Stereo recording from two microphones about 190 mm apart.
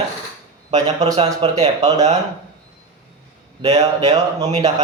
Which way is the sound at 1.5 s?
35° right (ahead or behind).